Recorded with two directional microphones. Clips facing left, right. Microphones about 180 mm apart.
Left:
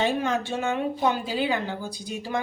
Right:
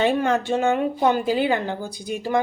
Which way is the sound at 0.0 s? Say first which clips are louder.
Right 5 dB; 60° right (ahead or behind).